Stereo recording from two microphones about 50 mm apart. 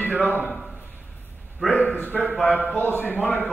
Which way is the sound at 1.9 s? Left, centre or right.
Left.